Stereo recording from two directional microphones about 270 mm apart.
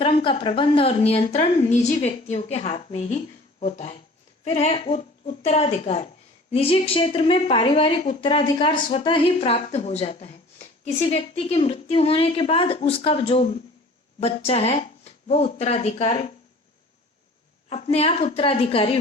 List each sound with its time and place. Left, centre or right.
0.0 s a woman's voice: centre
17.7 s a woman's voice: left